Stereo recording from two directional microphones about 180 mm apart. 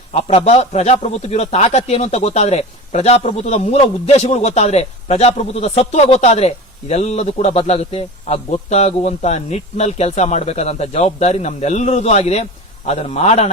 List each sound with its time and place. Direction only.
0.1 s a man's voice: 35° left (ahead or behind)